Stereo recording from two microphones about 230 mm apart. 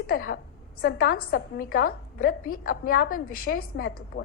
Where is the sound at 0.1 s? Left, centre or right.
Left.